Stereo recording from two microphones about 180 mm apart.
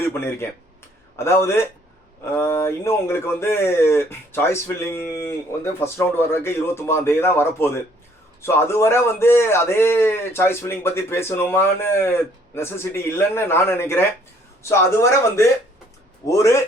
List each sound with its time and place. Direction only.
0.1 s a man's voice: 15° left (ahead or behind)